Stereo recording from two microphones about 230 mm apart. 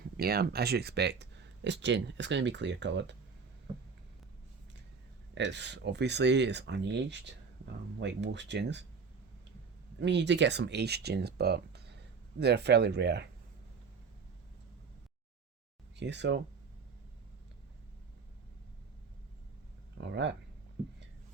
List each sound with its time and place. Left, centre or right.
0.2 s speech: right
5.3 s speech: right
10.0 s speech: right
16.0 s speech: right
20.0 s speech: right